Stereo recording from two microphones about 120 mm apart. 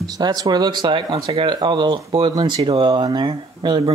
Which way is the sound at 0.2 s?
35° right (ahead or behind).